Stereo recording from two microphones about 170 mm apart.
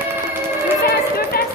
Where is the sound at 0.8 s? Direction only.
65° left (ahead or behind).